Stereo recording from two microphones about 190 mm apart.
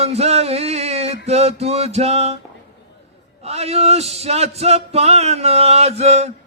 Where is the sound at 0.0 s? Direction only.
35° right (ahead or behind).